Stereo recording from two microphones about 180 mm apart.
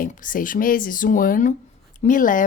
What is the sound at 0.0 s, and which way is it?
A woman's voice, 45° left (ahead or behind).